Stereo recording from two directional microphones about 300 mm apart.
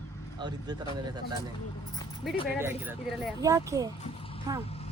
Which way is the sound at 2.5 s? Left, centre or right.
Centre.